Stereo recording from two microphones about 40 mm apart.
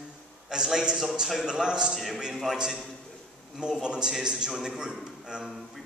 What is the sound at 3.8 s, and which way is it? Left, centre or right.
A man's voice, centre.